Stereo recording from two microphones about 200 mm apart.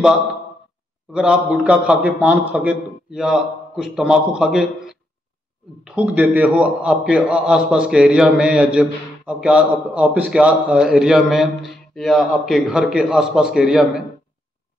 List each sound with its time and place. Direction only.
1.1 s a man's voice: 5° right (ahead or behind)